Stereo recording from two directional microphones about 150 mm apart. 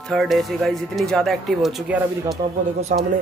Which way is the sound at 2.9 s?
60° right (ahead or behind).